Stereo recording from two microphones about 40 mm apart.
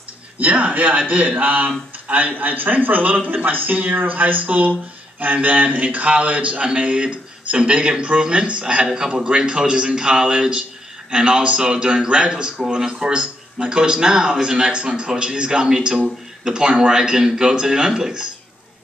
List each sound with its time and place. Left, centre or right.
0.4 s a man's voice: right
2.3 s a man's voice: right; by 18.2 s centre